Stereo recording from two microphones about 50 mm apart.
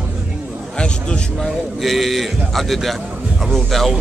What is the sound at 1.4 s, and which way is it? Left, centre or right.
A man's voice, centre.